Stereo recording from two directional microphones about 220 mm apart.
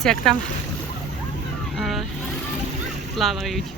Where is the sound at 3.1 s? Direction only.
Centre (ahead or behind).